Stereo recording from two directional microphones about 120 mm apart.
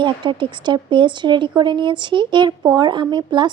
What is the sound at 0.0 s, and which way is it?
A woman's voice, 40° right (ahead or behind).